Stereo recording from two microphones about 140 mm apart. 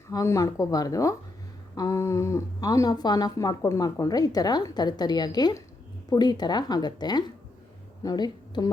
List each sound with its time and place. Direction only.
0.1 s a woman's voice: 25° left (ahead or behind)